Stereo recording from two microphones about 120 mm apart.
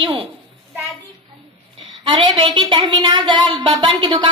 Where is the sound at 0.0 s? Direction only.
45° right (ahead or behind).